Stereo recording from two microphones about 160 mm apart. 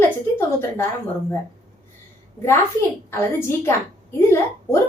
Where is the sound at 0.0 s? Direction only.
15° left (ahead or behind).